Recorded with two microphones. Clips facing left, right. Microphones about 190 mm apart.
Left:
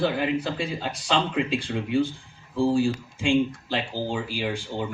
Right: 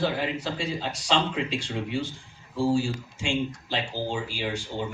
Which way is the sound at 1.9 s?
55° left (ahead or behind).